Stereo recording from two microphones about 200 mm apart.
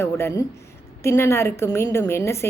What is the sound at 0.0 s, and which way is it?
A woman's voice, 10° left (ahead or behind).